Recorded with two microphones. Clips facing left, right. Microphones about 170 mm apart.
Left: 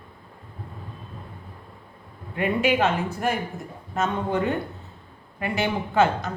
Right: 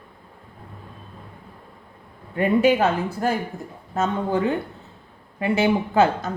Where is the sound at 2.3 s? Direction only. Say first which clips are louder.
Right 5 dB; 40° right (ahead or behind).